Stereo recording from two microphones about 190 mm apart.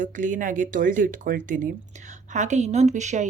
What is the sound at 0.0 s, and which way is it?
A woman's voice, 45° right (ahead or behind).